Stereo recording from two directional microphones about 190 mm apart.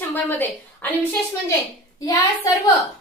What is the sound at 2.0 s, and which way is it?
Speech, 20° left (ahead or behind).